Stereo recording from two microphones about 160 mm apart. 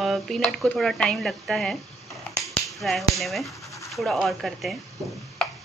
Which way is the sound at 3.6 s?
20° left (ahead or behind).